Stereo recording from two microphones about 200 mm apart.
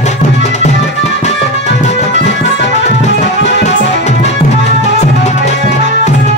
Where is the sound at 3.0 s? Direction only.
35° left (ahead or behind).